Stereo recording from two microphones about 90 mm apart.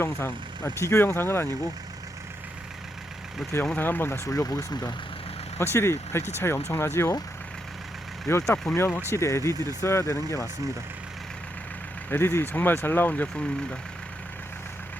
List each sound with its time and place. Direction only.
0.0 s speech: 25° left (ahead or behind)
3.4 s speech: 5° right (ahead or behind)
3.8 s speech: 20° left (ahead or behind); by 4.9 s 45° left (ahead or behind)
5.7 s speech: 30° left (ahead or behind)
8.3 s speech: 30° left (ahead or behind)
12.1 s speech: 25° left (ahead or behind)